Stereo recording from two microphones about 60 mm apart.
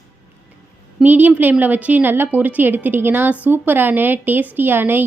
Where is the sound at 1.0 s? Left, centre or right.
Right.